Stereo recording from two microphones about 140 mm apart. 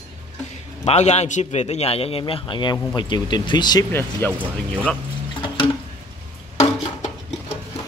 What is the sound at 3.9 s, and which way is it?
Speech, 15° left (ahead or behind).